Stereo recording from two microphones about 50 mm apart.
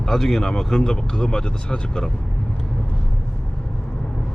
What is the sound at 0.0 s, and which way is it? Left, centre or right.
Speech, centre.